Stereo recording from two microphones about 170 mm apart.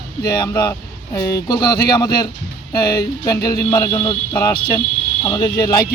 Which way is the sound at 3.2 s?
20° left (ahead or behind).